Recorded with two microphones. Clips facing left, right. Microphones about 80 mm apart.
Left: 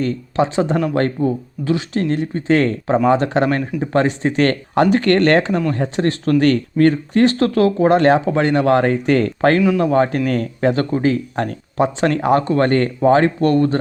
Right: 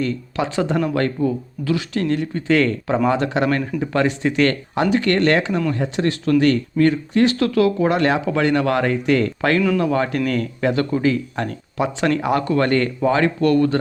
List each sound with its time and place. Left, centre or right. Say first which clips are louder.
0.0 s speech: left 4 dB; left